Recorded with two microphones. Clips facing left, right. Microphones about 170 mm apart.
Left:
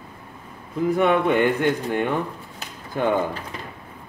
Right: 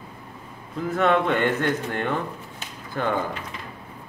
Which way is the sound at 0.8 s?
15° left (ahead or behind).